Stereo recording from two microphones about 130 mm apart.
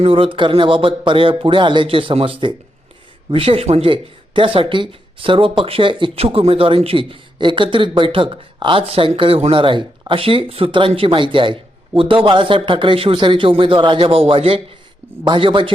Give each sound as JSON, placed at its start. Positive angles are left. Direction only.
{"t": 0.0, "sound": "speech", "side_deg": -45}